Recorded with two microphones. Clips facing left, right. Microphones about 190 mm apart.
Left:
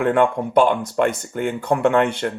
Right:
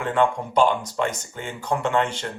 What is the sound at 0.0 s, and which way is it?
Speech, 55° left (ahead or behind).